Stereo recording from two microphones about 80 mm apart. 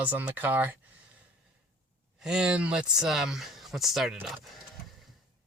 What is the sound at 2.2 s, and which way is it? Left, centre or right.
Speech, centre.